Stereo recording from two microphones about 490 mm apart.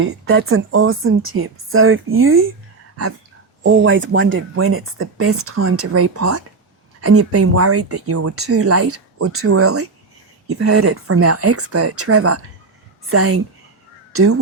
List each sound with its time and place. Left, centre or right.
0.0 s speech: right
3.6 s speech: right